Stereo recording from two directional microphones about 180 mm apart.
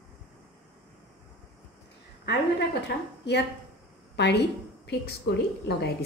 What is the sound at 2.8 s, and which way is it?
A woman's voice, 70° left (ahead or behind).